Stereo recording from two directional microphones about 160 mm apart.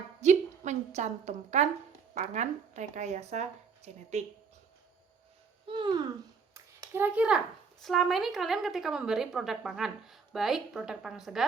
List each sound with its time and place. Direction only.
0.2 s a woman's voice: 45° right (ahead or behind)
5.6 s a child's voice: 30° right (ahead or behind); by 11.4 s 5° right (ahead or behind)